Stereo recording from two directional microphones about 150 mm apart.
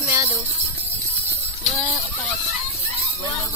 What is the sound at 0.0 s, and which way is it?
Jingle bell, 20° right (ahead or behind).